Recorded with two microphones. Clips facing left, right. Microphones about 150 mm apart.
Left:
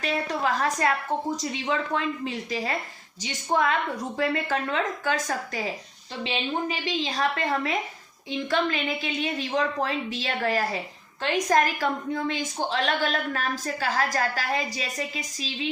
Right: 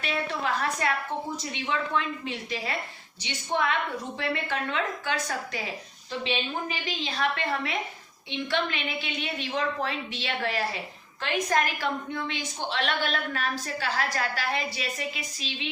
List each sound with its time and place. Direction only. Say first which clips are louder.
0.0 s a woman's voice: left 3 dB; 40° left (ahead or behind)
6.7 s a woman's voice: left 4 dB; 35° left (ahead or behind)